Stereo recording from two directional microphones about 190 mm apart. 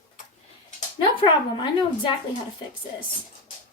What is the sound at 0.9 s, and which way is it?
Speech, 25° left (ahead or behind).